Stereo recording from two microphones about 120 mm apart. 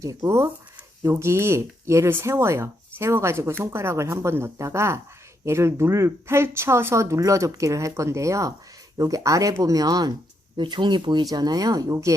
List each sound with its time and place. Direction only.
0.0 s speech: 25° right (ahead or behind)